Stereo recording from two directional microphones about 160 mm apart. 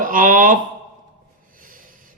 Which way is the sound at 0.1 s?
60° right (ahead or behind).